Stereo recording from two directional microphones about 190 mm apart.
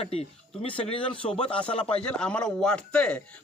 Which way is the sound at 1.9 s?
5° left (ahead or behind).